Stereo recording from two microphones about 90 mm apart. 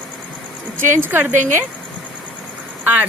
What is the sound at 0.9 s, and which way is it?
Speech, 25° right (ahead or behind).